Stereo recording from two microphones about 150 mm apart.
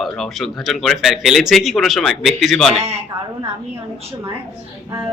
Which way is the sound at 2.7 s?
45° right (ahead or behind).